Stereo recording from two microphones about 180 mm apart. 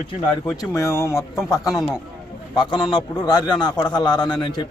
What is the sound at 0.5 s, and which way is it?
A man's voice, 20° left (ahead or behind).